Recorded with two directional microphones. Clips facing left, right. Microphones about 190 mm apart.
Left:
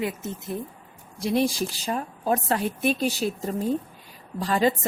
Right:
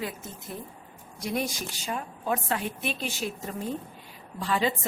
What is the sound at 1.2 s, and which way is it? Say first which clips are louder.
A woman's voice: left 7 dB; 30° left (ahead or behind).